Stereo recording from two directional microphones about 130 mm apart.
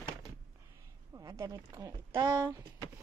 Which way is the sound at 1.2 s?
30° right (ahead or behind).